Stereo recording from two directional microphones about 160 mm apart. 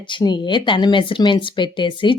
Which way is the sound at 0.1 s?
30° left (ahead or behind).